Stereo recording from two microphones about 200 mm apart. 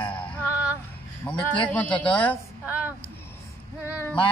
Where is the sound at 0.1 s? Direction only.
5° left (ahead or behind).